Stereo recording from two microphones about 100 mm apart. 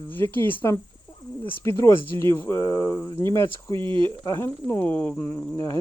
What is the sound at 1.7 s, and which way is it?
Speech, 30° left (ahead or behind).